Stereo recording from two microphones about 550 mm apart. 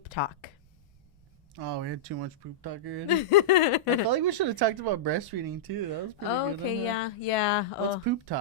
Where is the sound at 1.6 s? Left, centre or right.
Right.